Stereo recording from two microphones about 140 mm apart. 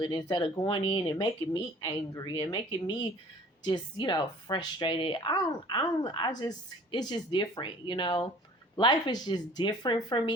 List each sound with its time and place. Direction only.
0.0 s speech: 30° left (ahead or behind)
2.3 s speech: 35° left (ahead or behind)